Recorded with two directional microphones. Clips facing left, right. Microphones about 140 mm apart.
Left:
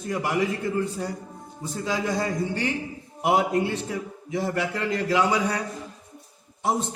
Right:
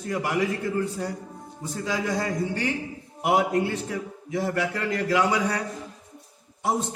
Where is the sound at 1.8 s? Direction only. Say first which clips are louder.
Left 1 dB; 25° left (ahead or behind).